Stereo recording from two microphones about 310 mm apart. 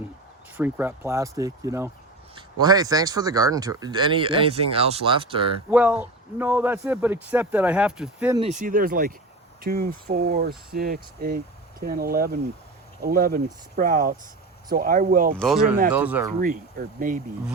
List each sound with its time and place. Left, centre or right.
0.5 s speech: centre
5.7 s speech: centre
8.4 s speech: right
15.4 s speech: centre
16.4 s speech: right